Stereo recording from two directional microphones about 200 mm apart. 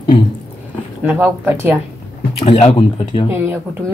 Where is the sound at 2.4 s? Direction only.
30° left (ahead or behind).